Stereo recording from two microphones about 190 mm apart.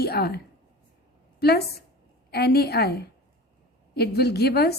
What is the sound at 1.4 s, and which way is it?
A woman's voice, 55° left (ahead or behind).